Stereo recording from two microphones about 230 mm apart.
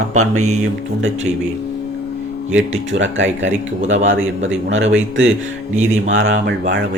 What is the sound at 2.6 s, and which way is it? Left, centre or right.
Speech, right.